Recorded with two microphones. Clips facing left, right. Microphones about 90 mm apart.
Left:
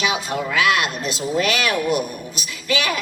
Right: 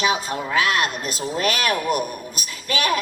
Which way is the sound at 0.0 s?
35° right (ahead or behind).